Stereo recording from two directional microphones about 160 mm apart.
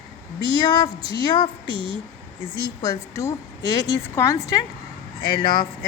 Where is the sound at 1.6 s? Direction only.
35° right (ahead or behind).